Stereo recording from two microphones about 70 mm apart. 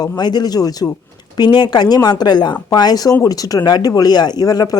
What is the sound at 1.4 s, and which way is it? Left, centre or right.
A woman's voice, left.